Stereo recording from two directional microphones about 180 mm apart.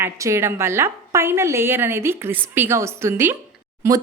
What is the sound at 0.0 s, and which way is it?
Speech, 15° right (ahead or behind).